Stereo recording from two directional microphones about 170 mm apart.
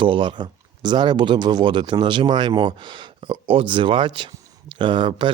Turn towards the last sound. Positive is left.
turn(degrees=-30)  # may be behind; listen again after turning